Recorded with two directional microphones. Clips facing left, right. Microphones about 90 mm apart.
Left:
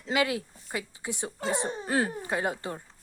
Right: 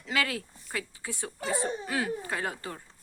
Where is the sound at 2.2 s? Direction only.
20° left (ahead or behind).